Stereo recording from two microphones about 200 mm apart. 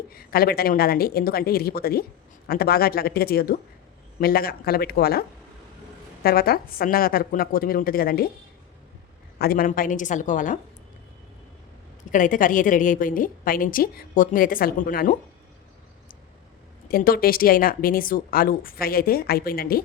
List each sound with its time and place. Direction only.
0.1 s a woman's voice: 50° left (ahead or behind)
6.2 s a woman's voice: 50° left (ahead or behind)
9.4 s a woman's voice: 50° left (ahead or behind)
12.1 s a woman's voice: 40° left (ahead or behind)
16.9 s a woman's voice: 50° left (ahead or behind)